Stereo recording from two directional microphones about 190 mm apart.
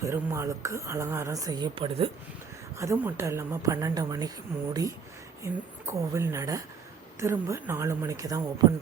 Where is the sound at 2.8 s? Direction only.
15° right (ahead or behind).